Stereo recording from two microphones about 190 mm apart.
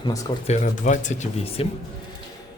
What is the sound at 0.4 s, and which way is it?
Speech, 40° left (ahead or behind).